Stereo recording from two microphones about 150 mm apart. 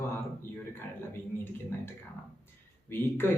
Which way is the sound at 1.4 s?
15° left (ahead or behind).